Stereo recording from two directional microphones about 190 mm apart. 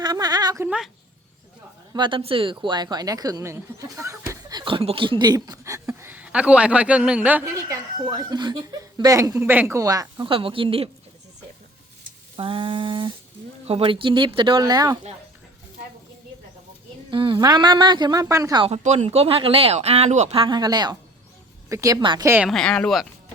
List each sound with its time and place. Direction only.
0.0 s a sound: 20° right (ahead or behind)
1.9 s speech: 25° right (ahead or behind); by 7.8 s 10° right (ahead or behind)
8.0 s speech: 20° right (ahead or behind)
12.4 s speech: 25° right (ahead or behind)
17.1 s speech: 25° right (ahead or behind)
18.6 s a woman's voice: 35° right (ahead or behind); by 22.3 s 20° right (ahead or behind)
22.4 s speech: 5° left (ahead or behind)